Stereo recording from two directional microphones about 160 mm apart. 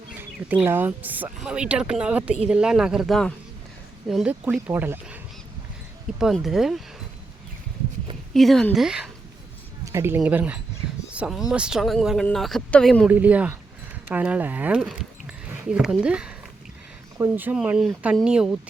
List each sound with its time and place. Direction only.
0.2 s speech: 10° right (ahead or behind)
8.3 s speech: centre (ahead or behind)
9.8 s a sound: 15° right (ahead or behind)
10.2 s speech: 10° right (ahead or behind)
13.1 s speech: 10° right (ahead or behind)